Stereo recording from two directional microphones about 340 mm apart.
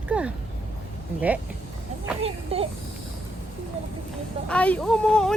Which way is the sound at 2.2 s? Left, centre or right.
Centre.